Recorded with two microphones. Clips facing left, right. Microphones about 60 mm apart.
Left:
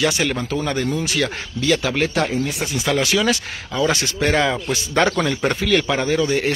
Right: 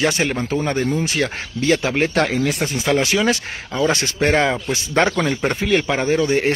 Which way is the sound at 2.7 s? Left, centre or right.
Right.